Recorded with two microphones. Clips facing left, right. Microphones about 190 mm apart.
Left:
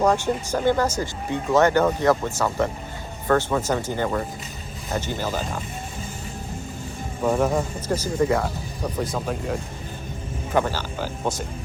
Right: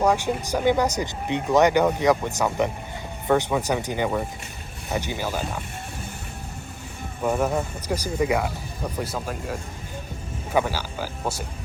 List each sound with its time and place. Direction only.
0.0 s speech: 10° right (ahead or behind)
7.2 s speech: 5° right (ahead or behind)